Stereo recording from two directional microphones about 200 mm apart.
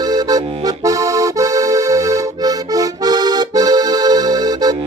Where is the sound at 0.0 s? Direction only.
20° right (ahead or behind).